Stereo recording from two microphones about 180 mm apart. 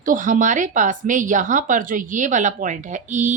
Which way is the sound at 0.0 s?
45° right (ahead or behind).